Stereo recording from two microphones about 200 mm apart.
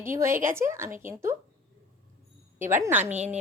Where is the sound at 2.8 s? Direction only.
10° right (ahead or behind).